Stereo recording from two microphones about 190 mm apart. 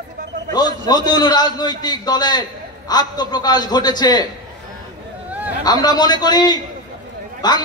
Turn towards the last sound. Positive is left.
turn(degrees=20)  # may be behind; listen again after turning